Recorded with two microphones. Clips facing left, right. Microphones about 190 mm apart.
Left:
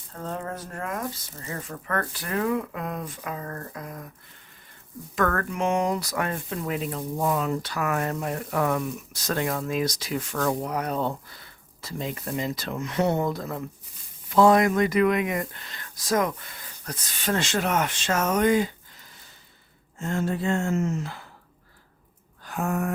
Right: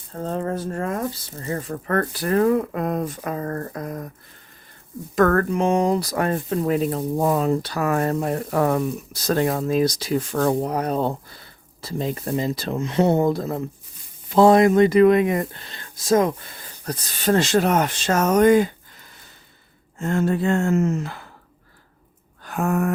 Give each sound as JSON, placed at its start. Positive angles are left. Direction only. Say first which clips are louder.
{"t": 0.1, "sound": "speech", "louder": "right 7 dB", "side_deg": -35}
{"t": 5.1, "sound": "speech", "louder": "right 8 dB", "side_deg": -40}
{"t": 20.0, "sound": "speech", "louder": "right 6 dB", "side_deg": -60}
{"t": 22.4, "sound": "a sound", "louder": "right 5 dB", "side_deg": -60}